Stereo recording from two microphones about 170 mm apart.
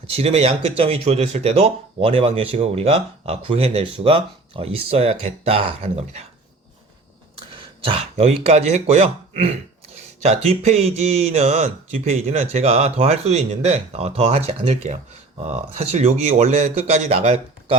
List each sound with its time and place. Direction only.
0.1 s speech: 35° right (ahead or behind)
7.6 s throat clearing: 30° right (ahead or behind)
8.2 s speech: 40° right (ahead or behind)